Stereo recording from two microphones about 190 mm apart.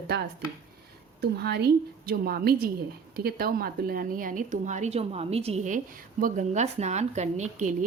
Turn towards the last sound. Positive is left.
turn(degrees=-40)  # may be behind; listen again after turning